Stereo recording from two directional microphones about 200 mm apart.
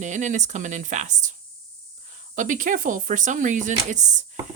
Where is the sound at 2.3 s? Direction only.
40° right (ahead or behind).